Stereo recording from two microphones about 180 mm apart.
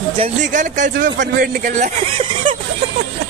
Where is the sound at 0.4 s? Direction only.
45° right (ahead or behind).